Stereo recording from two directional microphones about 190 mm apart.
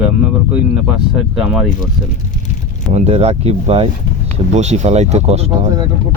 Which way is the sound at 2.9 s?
35° right (ahead or behind).